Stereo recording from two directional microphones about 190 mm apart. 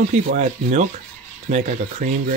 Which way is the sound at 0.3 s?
40° right (ahead or behind).